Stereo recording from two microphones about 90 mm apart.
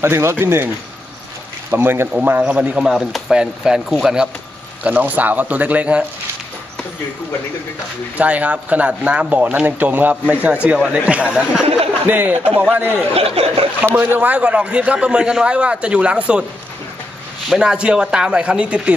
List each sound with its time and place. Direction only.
0.0 s speech: 30° right (ahead or behind)
1.7 s speech: 25° right (ahead or behind)
8.2 s speech: 15° right (ahead or behind)
13.1 s speech: 90° right
13.9 s speech: 20° right (ahead or behind)
17.5 s speech: 5° right (ahead or behind)